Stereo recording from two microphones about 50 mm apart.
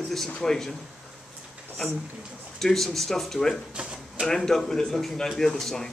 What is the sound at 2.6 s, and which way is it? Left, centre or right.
Speech, centre.